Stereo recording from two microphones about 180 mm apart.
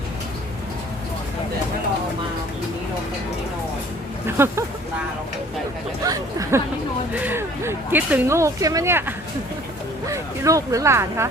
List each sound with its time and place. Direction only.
4.3 s speech: 15° right (ahead or behind)
6.0 s speech: 20° right (ahead or behind)